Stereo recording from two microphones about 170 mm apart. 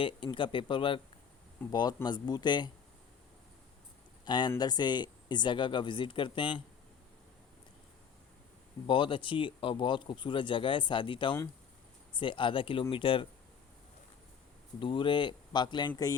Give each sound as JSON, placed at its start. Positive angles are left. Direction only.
{"t": 0.0, "sound": "speech", "side_deg": 30}
{"t": 4.3, "sound": "speech", "side_deg": 25}
{"t": 8.9, "sound": "speech", "side_deg": 30}
{"t": 14.8, "sound": "speech", "side_deg": 30}